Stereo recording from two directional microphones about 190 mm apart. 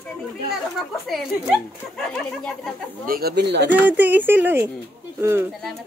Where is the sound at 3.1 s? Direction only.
55° right (ahead or behind).